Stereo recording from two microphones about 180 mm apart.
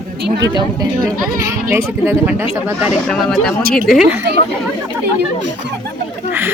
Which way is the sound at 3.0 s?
Centre (ahead or behind).